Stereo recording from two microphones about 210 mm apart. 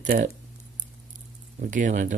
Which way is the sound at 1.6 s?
35° right (ahead or behind).